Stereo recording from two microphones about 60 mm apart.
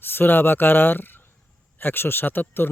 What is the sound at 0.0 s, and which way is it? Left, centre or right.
A man's voice, left.